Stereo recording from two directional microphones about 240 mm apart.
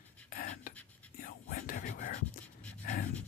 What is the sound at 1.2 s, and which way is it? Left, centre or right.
Whispering, left.